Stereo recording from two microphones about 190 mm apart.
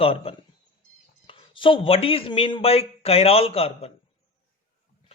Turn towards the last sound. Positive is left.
turn(degrees=30)  # may be behind; listen again after turning